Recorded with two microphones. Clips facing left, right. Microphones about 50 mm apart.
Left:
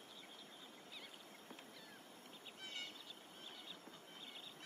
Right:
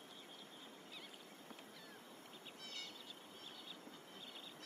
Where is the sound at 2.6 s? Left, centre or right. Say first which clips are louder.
Left 3 dB; left.